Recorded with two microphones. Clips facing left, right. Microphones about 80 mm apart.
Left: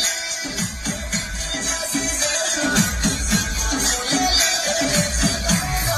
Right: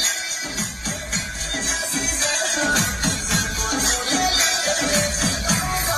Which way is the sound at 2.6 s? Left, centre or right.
Right.